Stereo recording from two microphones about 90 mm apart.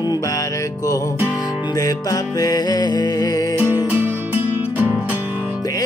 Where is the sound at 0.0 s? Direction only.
45° left (ahead or behind).